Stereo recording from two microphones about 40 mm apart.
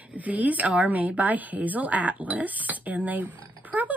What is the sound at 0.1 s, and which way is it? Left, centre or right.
A woman's voice, right.